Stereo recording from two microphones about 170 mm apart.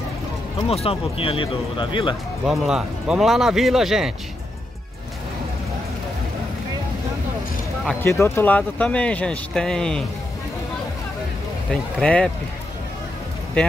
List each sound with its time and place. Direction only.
0.7 s speech: 35° left (ahead or behind)
2.4 s speech: centre (ahead or behind)
8.0 s speech: 15° left (ahead or behind)
11.7 s speech: 5° left (ahead or behind)